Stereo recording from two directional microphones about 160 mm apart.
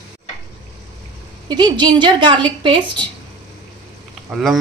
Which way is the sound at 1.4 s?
25° right (ahead or behind).